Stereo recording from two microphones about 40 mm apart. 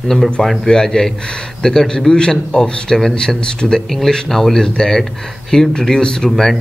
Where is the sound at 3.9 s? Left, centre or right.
Centre.